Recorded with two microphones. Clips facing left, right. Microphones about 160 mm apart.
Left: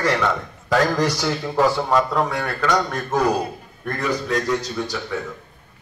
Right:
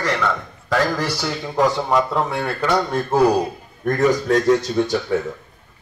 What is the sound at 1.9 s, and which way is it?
Speech, 25° right (ahead or behind).